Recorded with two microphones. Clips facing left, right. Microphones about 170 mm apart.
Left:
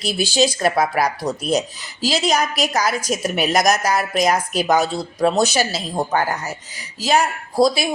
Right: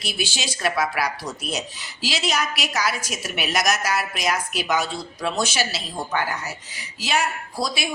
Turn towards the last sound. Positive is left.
turn(degrees=40)  # may be behind; listen again after turning